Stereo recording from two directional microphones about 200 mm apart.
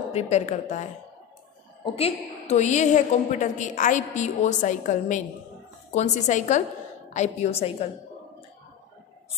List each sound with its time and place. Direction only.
0.1 s a woman's voice: 35° left (ahead or behind)
2.0 s a woman's voice: 30° left (ahead or behind)